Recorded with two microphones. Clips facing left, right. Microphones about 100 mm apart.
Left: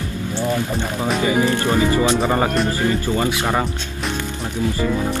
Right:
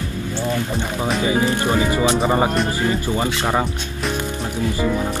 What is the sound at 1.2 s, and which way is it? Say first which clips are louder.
Speech: left 1 dB; 15° right (ahead or behind).